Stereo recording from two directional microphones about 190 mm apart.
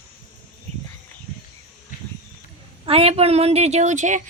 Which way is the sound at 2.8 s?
30° right (ahead or behind).